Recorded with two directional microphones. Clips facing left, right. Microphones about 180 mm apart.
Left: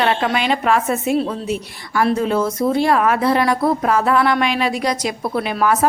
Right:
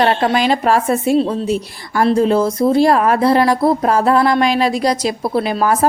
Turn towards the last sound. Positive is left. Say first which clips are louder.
# right 2 dB
turn(degrees=-35)  # may be behind; listen again after turning